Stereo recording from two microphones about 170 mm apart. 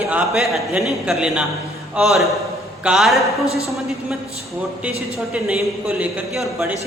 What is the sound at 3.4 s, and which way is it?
Speech, 20° left (ahead or behind).